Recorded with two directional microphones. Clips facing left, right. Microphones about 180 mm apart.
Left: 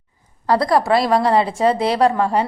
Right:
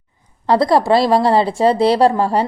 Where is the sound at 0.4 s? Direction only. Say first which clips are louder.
Right 3 dB; 25° right (ahead or behind).